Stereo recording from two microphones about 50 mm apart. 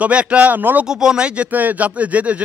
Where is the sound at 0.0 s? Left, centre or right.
Right.